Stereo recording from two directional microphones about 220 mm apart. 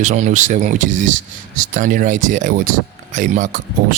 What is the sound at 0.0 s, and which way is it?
Speech, 35° right (ahead or behind).